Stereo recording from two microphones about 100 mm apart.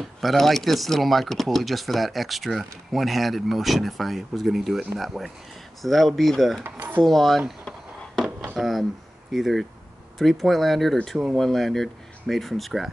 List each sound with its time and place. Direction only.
0.2 s speech: centre (ahead or behind)
6.6 s speech: 20° right (ahead or behind)
7.0 s speech: centre (ahead or behind)
8.5 s speech: centre (ahead or behind)